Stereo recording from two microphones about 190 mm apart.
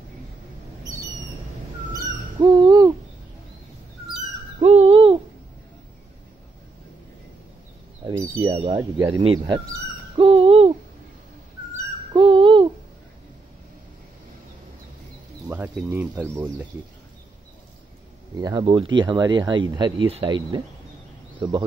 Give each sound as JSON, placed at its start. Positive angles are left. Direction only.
{"t": 2.3, "sound": "owl", "side_deg": -20}
{"t": 4.6, "sound": "owl", "side_deg": -30}
{"t": 8.5, "sound": "speech", "side_deg": -30}
{"t": 10.1, "sound": "owl", "side_deg": -30}
{"t": 11.7, "sound": "cat", "side_deg": -25}
{"t": 15.4, "sound": "speech", "side_deg": -10}
{"t": 18.4, "sound": "speech", "side_deg": -25}